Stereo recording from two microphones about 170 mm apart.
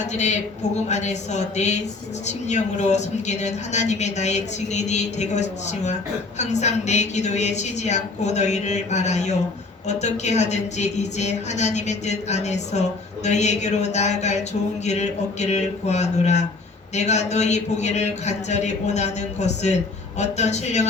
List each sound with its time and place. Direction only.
0.1 s a man's voice: 40° left (ahead or behind)